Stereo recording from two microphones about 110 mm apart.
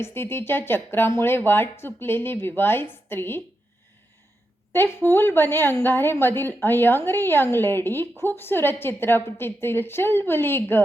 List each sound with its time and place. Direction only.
0.0 s a woman's voice: 20° left (ahead or behind)
4.7 s a woman's voice: 20° left (ahead or behind)